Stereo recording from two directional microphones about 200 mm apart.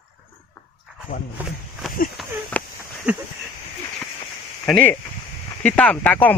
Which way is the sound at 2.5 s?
5° left (ahead or behind).